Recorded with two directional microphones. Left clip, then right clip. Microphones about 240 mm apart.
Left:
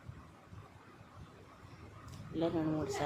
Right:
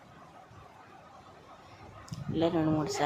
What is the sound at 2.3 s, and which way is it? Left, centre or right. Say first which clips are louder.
Speech: right 7 dB; centre.